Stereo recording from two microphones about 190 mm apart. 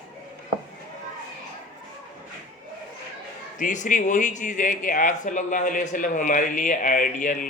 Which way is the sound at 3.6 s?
40° left (ahead or behind).